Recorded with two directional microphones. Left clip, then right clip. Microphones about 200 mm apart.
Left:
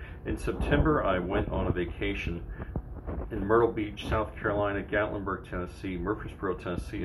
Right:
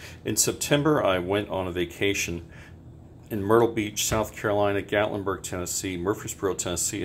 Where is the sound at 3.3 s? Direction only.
40° right (ahead or behind).